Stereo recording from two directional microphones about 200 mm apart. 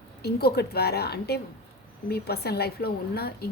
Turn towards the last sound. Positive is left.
turn(degrees=50)  # may be behind; listen again after turning